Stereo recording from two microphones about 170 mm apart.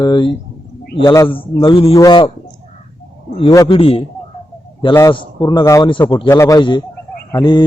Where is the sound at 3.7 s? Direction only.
35° left (ahead or behind).